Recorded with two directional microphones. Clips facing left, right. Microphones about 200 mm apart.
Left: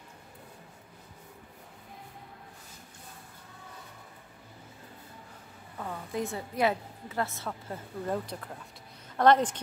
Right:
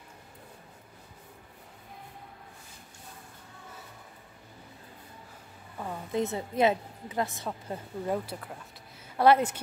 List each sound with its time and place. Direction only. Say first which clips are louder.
5.8 s a woman's voice: right 3 dB; 15° right (ahead or behind)
8.3 s a woman's voice: even; 5° right (ahead or behind)